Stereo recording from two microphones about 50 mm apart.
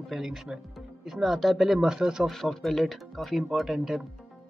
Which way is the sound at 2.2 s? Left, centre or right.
Centre.